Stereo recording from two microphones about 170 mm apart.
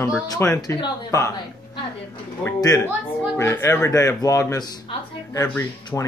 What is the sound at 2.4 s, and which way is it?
Speech, 15° left (ahead or behind).